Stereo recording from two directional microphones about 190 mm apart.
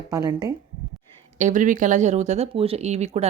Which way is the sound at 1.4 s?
40° right (ahead or behind).